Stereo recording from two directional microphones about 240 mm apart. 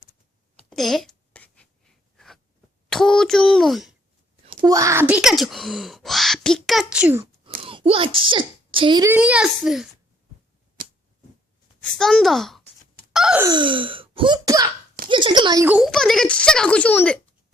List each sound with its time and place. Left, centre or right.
0.7 s a sound: centre
4.6 s speech: centre
7.6 s a child's voice: right
9.1 s speech: centre
11.8 s speech: centre
13.1 s wail: centre
13.5 s throat clearing: centre
15.1 s speech: centre